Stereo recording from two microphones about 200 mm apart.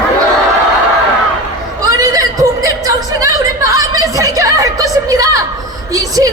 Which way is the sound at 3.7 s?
15° right (ahead or behind).